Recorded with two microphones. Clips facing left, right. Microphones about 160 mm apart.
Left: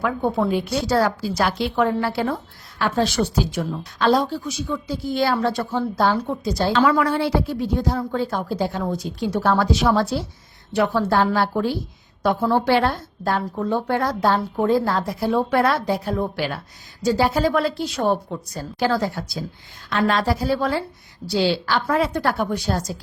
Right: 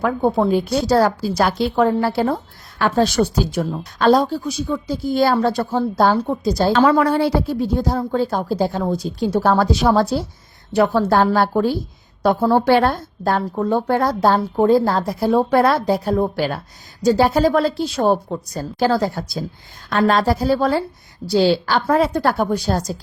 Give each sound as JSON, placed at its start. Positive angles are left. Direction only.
{"t": 0.0, "sound": "speech", "side_deg": -35}